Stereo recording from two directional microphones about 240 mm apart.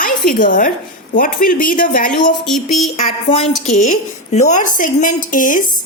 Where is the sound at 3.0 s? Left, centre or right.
Left.